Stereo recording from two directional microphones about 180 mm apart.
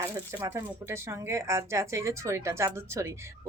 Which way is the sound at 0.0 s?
15° right (ahead or behind).